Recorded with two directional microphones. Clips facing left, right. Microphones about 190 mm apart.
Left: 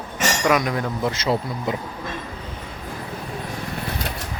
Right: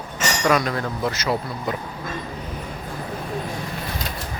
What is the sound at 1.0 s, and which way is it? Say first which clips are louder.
Speech: left 1 dB; 25° left (ahead or behind).